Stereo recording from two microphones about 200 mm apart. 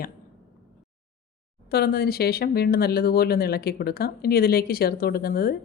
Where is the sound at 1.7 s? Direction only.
50° left (ahead or behind).